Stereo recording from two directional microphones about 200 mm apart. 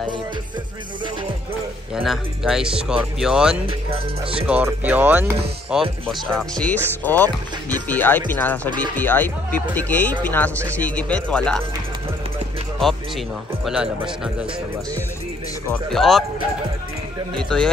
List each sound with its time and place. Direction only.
2.0 s speech: centre (ahead or behind)
3.6 s speech: 25° right (ahead or behind)
4.5 s speech: 10° right (ahead or behind); by 8.5 s 10° left (ahead or behind)
8.6 s speech: 20° right (ahead or behind)
8.9 s speech: 10° left (ahead or behind)
13.7 s speech: 5° right (ahead or behind)
15.7 s speech: centre (ahead or behind)
17.4 s speech: 5° left (ahead or behind)